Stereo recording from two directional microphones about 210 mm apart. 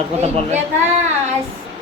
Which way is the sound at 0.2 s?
30° right (ahead or behind).